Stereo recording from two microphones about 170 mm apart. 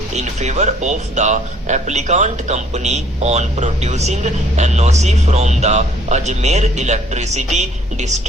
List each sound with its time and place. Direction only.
0.1 s speech: 40° right (ahead or behind)